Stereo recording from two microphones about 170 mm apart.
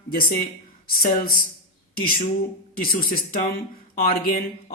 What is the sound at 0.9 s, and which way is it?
Speech, 60° left (ahead or behind).